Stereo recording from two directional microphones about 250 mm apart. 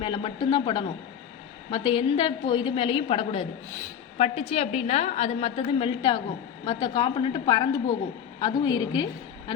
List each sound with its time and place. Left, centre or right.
0.0 s a woman's voice: centre